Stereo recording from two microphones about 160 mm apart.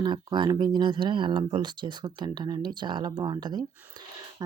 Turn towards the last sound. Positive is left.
turn(degrees=-25)  # may be behind; listen again after turning